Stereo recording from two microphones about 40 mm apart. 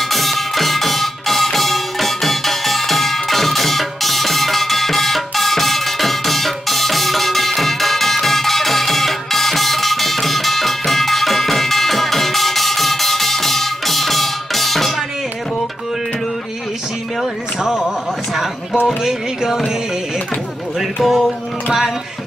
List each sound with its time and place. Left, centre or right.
0.1 s music: centre
17.6 s a sound: centre
19.0 s music: centre
21.0 s music: centre